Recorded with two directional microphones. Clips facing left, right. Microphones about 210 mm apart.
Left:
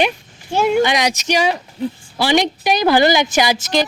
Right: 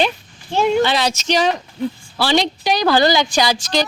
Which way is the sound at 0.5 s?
10° left (ahead or behind).